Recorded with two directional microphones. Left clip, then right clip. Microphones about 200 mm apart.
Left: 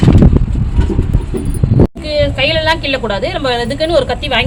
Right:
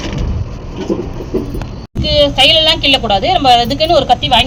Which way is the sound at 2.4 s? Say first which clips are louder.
Right 4 dB; 15° left (ahead or behind).